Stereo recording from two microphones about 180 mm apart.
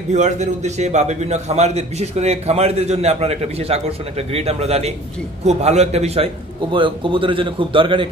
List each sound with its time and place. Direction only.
0.1 s a man's voice: 40° right (ahead or behind)